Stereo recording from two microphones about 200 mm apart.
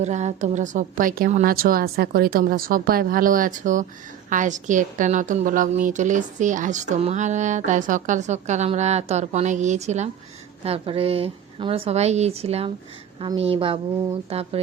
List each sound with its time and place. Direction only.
0.0 s a woman's voice: 35° right (ahead or behind)